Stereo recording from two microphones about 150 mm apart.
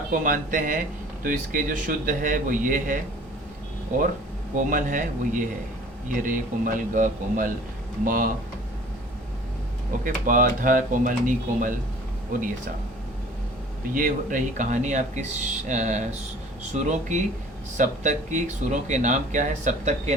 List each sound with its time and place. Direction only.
0.1 s speech: 65° right (ahead or behind)
4.5 s speech: 60° right (ahead or behind)
10.0 s speech: 65° right (ahead or behind)
13.9 s speech: 65° right (ahead or behind)